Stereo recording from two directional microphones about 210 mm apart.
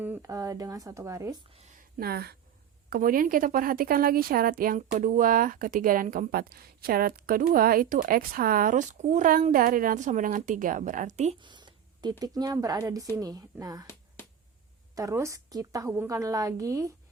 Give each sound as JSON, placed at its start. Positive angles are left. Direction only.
{"t": 0.0, "sound": "speech", "side_deg": -10}
{"t": 1.5, "sound": "speech", "side_deg": -25}
{"t": 2.0, "sound": "a woman's voice", "side_deg": -50}
{"t": 14.9, "sound": "speech", "side_deg": -15}